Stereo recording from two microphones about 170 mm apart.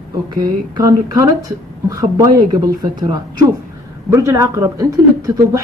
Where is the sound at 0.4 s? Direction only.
20° right (ahead or behind).